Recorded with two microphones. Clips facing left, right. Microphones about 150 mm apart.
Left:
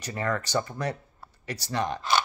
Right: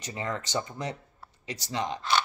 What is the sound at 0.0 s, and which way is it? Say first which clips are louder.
Speech: left 4 dB; 20° right (ahead or behind).